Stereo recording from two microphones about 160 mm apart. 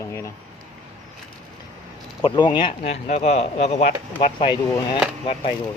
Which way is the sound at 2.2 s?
30° left (ahead or behind).